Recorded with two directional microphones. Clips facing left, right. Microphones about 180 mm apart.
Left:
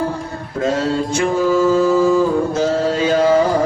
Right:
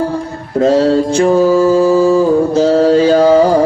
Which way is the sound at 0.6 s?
35° right (ahead or behind).